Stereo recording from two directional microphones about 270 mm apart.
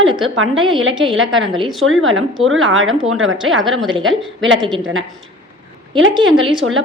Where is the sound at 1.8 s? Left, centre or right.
Right.